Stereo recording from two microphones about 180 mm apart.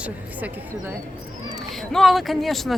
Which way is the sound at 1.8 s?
Centre (ahead or behind).